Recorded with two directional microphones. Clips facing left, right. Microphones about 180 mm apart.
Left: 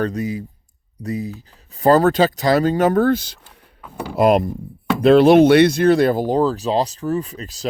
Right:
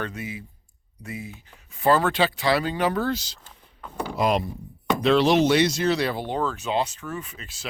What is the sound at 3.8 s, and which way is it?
Speech, 5° left (ahead or behind).